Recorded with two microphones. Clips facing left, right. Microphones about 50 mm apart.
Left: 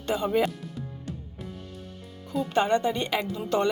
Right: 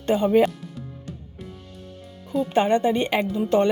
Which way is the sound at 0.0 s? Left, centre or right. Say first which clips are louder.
Right 6 dB; right.